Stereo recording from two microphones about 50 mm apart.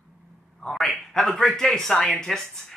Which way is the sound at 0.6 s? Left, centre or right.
Centre.